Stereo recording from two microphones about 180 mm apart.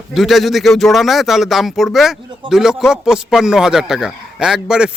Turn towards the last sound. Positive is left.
turn(degrees=-5)  # may be behind; listen again after turning